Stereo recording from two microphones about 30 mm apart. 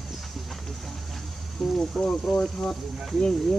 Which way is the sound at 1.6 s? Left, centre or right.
Centre.